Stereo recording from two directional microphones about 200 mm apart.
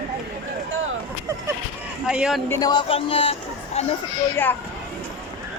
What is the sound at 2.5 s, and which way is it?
Speech, 20° left (ahead or behind).